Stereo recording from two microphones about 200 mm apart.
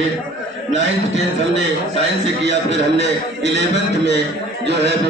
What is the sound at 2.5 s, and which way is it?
A man's voice, 65° right (ahead or behind).